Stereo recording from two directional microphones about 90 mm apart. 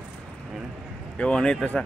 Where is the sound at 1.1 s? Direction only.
10° left (ahead or behind).